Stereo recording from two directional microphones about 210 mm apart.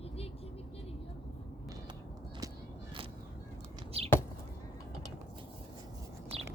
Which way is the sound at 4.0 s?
30° right (ahead or behind).